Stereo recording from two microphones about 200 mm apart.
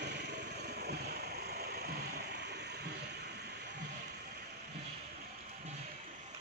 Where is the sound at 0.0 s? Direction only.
55° right (ahead or behind).